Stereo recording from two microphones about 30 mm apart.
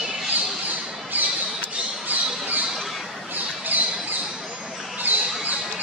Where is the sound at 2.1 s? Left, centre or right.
Right.